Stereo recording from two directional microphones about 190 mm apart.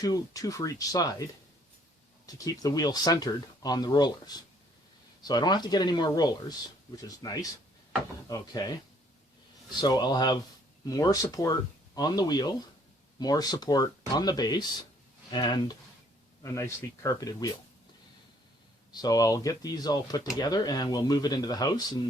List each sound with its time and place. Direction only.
0.0 s speech: 20° left (ahead or behind)
9.8 s speech: 20° left (ahead or behind)
18.9 s speech: 20° left (ahead or behind)